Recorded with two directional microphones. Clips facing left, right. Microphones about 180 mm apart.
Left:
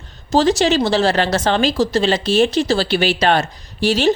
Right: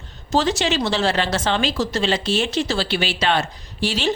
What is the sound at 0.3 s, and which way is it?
A woman's voice, 35° left (ahead or behind).